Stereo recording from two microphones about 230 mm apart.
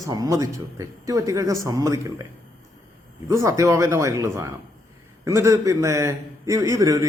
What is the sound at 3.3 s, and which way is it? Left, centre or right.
A man's voice, centre.